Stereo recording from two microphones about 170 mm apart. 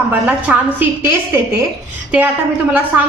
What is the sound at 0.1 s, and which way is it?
A woman's voice, 10° right (ahead or behind).